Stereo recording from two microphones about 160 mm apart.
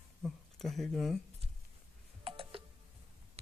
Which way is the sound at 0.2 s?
Centre (ahead or behind).